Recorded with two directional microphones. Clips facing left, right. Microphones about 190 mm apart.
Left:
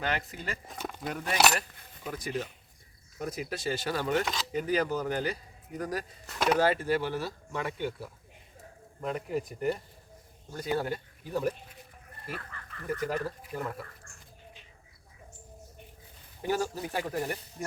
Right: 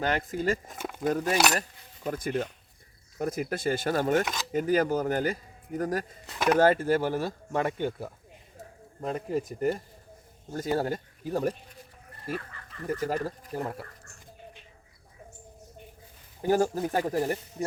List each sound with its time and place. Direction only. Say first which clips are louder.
0.0 s speech: right 6 dB; 45° right (ahead or behind)
0.7 s speech: right 1 dB; 5° right (ahead or behind)
1.0 s speech: right 3 dB; 45° right (ahead or behind)
9.0 s speech: right 2 dB; 35° right (ahead or behind)
12.9 s speech: right 2 dB; 40° right (ahead or behind)
16.4 s speech: right 6 dB; 45° right (ahead or behind)